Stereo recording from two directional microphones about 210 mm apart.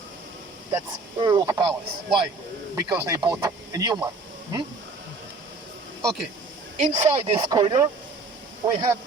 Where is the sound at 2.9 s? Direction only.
20° right (ahead or behind).